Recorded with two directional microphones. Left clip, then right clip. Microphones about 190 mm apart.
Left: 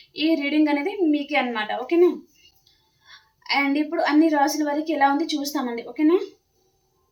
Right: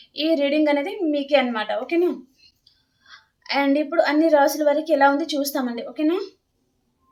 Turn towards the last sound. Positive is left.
turn(degrees=-25)  # may be behind; listen again after turning